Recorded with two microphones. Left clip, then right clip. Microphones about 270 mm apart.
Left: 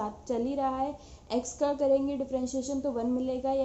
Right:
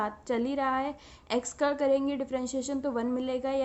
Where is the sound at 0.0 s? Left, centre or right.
Right.